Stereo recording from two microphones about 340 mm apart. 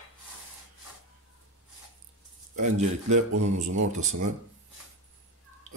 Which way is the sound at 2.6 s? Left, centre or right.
Centre.